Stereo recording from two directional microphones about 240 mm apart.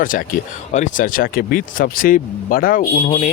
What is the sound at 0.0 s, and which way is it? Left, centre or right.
Speech, left.